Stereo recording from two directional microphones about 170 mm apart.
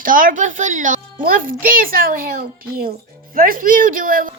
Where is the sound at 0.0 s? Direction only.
55° right (ahead or behind).